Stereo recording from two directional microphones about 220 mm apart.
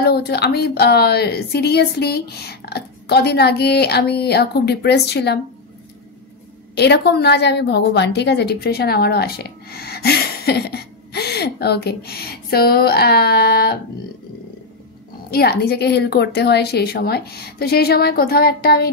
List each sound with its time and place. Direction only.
0.0 s a woman's voice: 45° left (ahead or behind)
6.7 s a woman's voice: 50° left (ahead or behind)
15.3 s a woman's voice: 45° left (ahead or behind)